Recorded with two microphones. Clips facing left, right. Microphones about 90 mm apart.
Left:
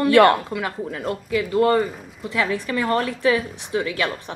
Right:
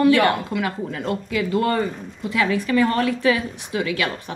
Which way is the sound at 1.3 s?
25° left (ahead or behind).